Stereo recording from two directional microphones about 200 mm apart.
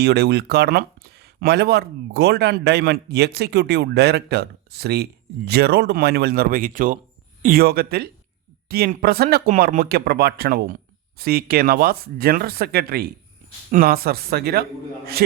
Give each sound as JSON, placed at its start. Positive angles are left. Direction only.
{"t": 0.0, "sound": "speech", "side_deg": -55}